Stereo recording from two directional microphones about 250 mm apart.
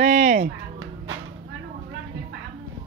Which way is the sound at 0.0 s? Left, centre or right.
Right.